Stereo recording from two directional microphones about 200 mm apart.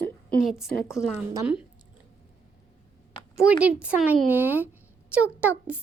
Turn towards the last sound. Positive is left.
turn(degrees=-5)  # may be behind; listen again after turning